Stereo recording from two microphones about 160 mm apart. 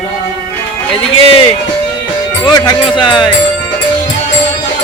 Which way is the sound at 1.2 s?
35° left (ahead or behind).